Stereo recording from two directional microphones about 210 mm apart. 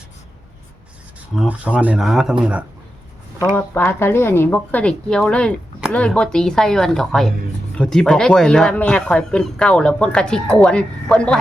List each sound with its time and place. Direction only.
1.4 s speech: 5° right (ahead or behind)
3.5 s speech: 10° left (ahead or behind)